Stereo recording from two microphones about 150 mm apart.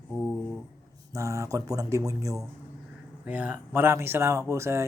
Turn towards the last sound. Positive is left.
turn(degrees=-20)  # may be behind; listen again after turning